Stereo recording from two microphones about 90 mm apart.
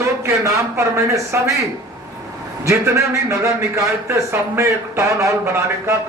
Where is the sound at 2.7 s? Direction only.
35° right (ahead or behind).